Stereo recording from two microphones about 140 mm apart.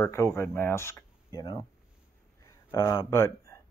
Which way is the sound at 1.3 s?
30° left (ahead or behind).